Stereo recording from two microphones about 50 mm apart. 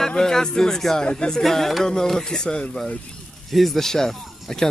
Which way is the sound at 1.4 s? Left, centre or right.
Centre.